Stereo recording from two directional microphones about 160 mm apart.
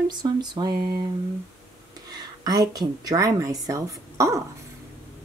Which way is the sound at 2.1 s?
25° right (ahead or behind).